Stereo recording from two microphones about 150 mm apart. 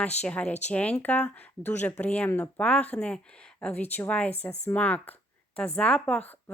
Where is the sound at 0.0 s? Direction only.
10° left (ahead or behind).